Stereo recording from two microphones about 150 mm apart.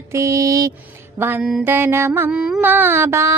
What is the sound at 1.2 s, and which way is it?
Mantra, 15° right (ahead or behind).